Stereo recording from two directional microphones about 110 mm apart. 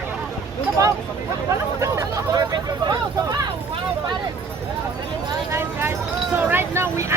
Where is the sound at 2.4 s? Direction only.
40° right (ahead or behind).